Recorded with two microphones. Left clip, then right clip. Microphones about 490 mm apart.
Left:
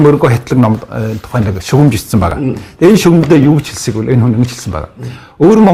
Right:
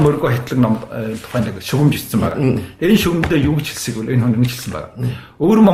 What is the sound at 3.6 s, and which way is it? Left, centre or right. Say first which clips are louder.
A man's voice: left 7 dB; left.